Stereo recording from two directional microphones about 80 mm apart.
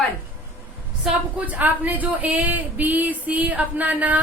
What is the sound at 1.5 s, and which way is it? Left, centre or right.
Speech, right.